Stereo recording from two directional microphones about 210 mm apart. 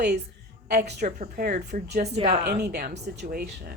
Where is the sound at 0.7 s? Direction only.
50° right (ahead or behind).